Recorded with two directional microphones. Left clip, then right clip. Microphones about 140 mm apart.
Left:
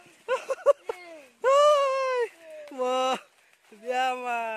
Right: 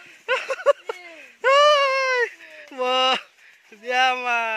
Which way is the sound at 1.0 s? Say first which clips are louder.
Right 4 dB; 10° left (ahead or behind).